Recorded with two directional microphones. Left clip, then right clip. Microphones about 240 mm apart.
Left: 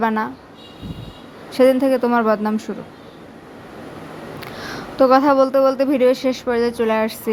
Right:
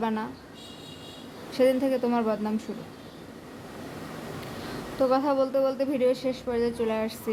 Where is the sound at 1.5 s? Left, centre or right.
Centre.